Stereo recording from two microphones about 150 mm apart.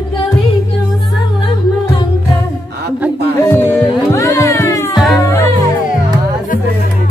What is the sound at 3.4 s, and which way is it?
Music, 15° left (ahead or behind).